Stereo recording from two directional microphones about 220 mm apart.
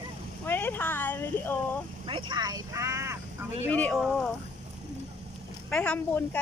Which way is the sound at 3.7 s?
5° left (ahead or behind).